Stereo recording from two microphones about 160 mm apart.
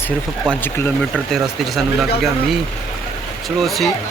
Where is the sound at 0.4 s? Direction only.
15° left (ahead or behind).